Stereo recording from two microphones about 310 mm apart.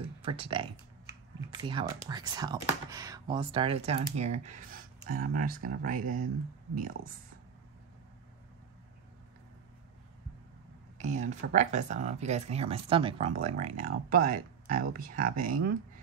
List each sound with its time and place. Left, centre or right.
0.2 s speech: centre
11.0 s speech: right